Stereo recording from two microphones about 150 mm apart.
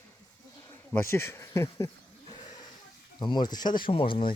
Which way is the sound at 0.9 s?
15° left (ahead or behind).